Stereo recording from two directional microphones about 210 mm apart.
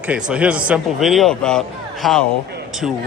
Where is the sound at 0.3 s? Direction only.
5° right (ahead or behind).